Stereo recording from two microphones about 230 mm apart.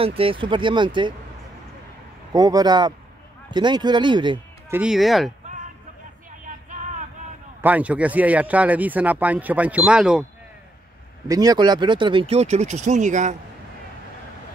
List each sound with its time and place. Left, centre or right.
0.0 s speech: right
2.3 s a man's voice: centre
4.7 s speech: centre
6.4 s a sound: right
7.6 s a man's voice: centre
11.2 s speech: centre; by 13.4 s right